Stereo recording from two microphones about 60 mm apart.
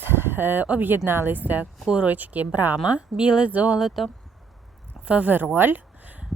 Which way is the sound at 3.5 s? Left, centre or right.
Right.